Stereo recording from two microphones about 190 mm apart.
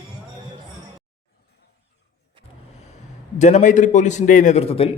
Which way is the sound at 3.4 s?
40° left (ahead or behind).